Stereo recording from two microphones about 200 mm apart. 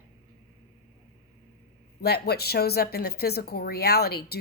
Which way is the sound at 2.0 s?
55° left (ahead or behind).